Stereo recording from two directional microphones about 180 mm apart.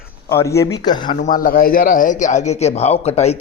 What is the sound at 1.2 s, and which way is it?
Speech, 50° left (ahead or behind).